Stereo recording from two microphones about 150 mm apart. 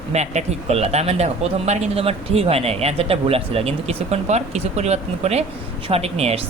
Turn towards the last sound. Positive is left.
turn(degrees=-45)  # may be behind; listen again after turning